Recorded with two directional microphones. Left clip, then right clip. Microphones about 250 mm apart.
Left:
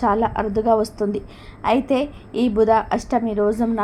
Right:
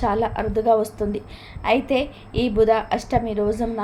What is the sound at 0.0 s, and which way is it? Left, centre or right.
A woman's voice, centre.